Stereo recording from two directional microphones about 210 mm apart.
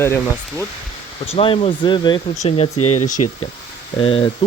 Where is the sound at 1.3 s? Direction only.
25° left (ahead or behind).